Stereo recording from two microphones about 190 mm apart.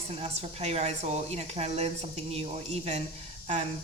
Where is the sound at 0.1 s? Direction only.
30° right (ahead or behind).